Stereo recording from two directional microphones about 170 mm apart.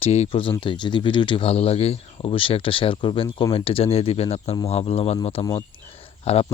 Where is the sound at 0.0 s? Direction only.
35° left (ahead or behind).